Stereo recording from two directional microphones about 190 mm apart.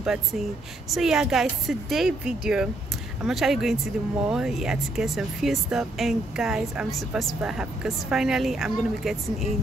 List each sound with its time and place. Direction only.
0.0 s speech: centre (ahead or behind)